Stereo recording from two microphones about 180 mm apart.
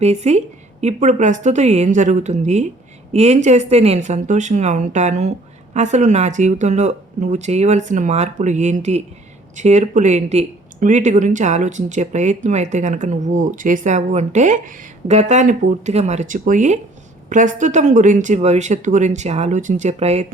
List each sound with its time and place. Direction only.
0.0 s speech: 35° right (ahead or behind)